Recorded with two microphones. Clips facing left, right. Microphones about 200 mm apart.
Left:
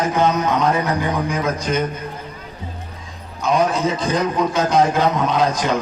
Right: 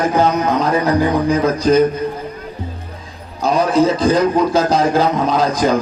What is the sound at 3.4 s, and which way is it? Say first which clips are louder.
Speech: right 4 dB; 35° right (ahead or behind).